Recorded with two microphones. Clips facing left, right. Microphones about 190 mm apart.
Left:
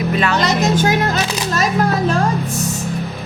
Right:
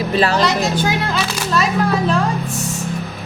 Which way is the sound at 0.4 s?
45° left (ahead or behind).